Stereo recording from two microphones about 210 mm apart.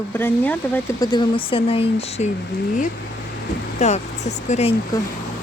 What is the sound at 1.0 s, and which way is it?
Speech, 20° left (ahead or behind).